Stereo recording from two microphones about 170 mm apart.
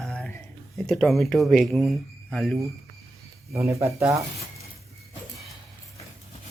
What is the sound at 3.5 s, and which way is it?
Speech, 15° right (ahead or behind).